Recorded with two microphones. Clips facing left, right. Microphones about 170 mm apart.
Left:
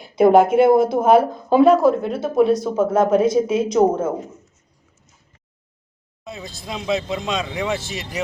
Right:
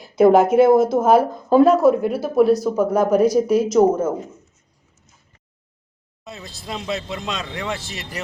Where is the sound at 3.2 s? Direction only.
25° left (ahead or behind).